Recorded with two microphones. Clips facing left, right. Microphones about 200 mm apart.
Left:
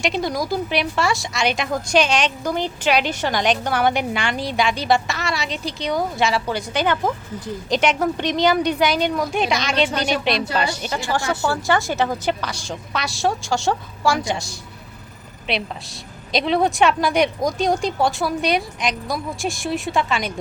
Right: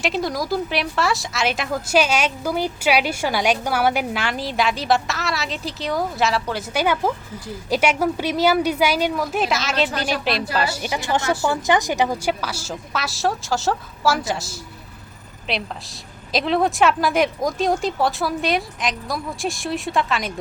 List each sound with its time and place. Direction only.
0.0 s speech: centre (ahead or behind)
10.8 s speech: 15° right (ahead or behind); by 20.3 s centre (ahead or behind)